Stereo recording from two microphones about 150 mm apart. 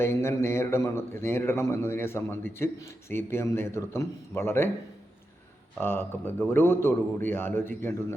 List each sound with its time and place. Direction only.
0.0 s a man's voice: 15° left (ahead or behind)
5.7 s a man's voice: 15° left (ahead or behind)